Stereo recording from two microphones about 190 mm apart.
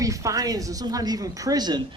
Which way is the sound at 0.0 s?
15° right (ahead or behind).